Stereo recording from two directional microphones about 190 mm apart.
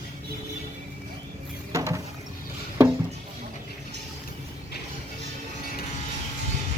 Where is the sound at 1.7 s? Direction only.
15° right (ahead or behind).